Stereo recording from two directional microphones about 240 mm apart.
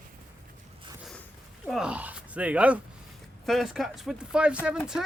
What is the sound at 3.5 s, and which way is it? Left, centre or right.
Speech, centre.